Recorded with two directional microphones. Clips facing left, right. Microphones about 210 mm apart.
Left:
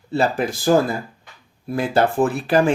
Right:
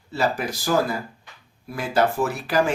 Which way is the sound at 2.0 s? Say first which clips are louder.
Left 3 dB; 55° left (ahead or behind).